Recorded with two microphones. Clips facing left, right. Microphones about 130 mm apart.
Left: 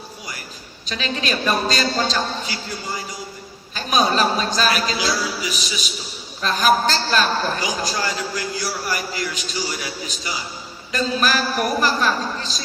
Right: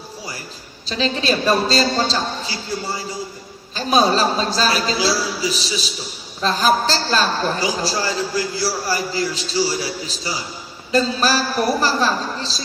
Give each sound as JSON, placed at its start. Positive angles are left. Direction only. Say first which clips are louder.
{"t": 0.9, "sound": "a man's voice", "louder": "right 5 dB", "side_deg": -30}
{"t": 3.8, "sound": "a man's voice", "louder": "right 3 dB", "side_deg": -30}